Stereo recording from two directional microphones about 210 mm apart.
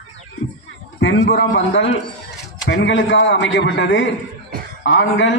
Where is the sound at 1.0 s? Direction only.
60° left (ahead or behind).